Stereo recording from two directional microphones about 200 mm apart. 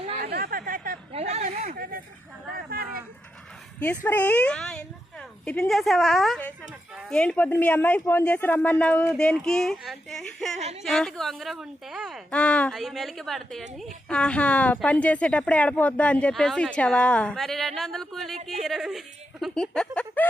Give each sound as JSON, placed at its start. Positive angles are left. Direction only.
{"t": 0.2, "sound": "chatter", "side_deg": -50}
{"t": 1.1, "sound": "a sound", "side_deg": -30}
{"t": 4.0, "sound": "a woman's voice", "side_deg": 10}